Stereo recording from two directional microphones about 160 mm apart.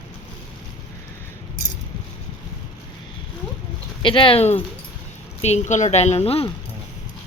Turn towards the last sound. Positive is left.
turn(degrees=40)  # may be behind; listen again after turning